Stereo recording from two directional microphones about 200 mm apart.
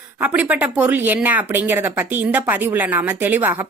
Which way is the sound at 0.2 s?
5° right (ahead or behind).